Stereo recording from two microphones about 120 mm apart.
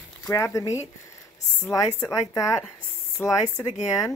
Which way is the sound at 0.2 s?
25° left (ahead or behind).